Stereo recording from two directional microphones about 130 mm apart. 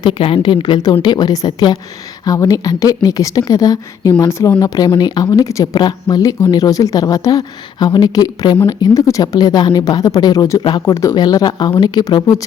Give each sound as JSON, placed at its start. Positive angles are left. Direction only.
{"t": 0.0, "sound": "speech", "side_deg": 40}
{"t": 10.8, "sound": "speech", "side_deg": 25}